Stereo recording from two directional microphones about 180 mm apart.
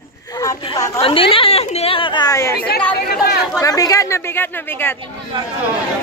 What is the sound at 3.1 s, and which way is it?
Speech, 60° left (ahead or behind).